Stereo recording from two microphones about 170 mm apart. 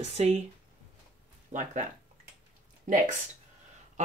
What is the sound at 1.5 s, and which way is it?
Speech, 50° right (ahead or behind).